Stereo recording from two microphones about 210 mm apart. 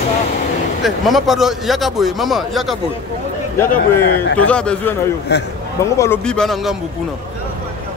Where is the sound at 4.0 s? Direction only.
50° left (ahead or behind).